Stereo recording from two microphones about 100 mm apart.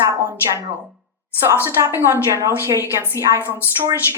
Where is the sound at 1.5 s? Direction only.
25° right (ahead or behind).